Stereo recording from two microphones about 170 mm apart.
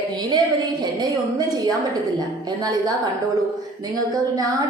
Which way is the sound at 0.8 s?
25° right (ahead or behind).